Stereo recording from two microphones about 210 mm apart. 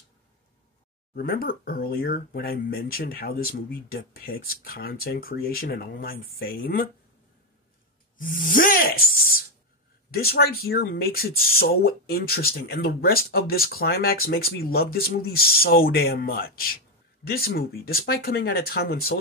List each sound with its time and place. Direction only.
1.1 s speech: 45° left (ahead or behind)
8.2 s speech: 40° left (ahead or behind)
10.1 s speech: 45° left (ahead or behind)